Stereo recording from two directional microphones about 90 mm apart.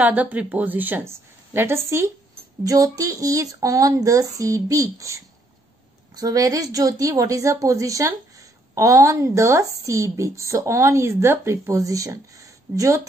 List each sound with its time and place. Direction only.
0.0 s a woman's voice: 15° right (ahead or behind); by 13.0 s 35° right (ahead or behind)